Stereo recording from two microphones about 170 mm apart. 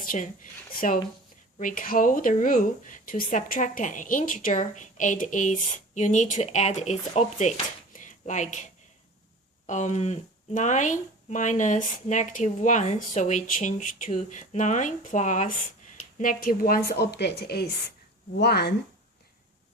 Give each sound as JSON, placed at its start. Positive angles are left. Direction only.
{"t": 0.0, "sound": "a sound", "side_deg": 50}
{"t": 1.5, "sound": "speech", "side_deg": 55}
{"t": 9.6, "sound": "a woman's voice", "side_deg": 45}